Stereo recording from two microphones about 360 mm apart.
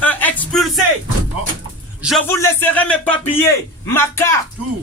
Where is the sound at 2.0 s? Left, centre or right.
Centre.